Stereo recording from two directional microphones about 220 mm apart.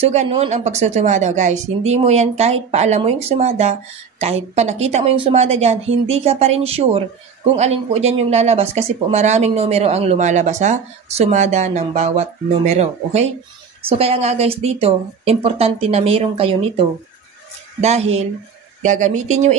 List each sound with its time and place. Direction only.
0.0 s speech: 30° right (ahead or behind)